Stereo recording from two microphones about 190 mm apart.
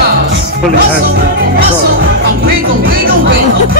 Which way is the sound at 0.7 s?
50° right (ahead or behind).